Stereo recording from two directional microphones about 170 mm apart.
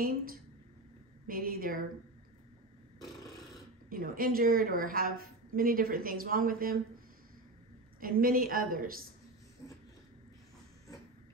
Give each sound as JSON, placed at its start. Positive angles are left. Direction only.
{"t": 1.2, "sound": "a woman's voice", "side_deg": -60}
{"t": 3.9, "sound": "a woman's voice", "side_deg": -60}
{"t": 8.0, "sound": "a woman's voice", "side_deg": -60}
{"t": 9.6, "sound": "a sound", "side_deg": 15}